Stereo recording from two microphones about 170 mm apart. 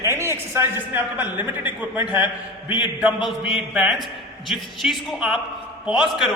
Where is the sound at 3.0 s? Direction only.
5° right (ahead or behind).